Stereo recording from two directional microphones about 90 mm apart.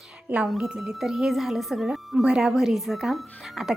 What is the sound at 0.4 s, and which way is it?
A woman's voice, centre (ahead or behind).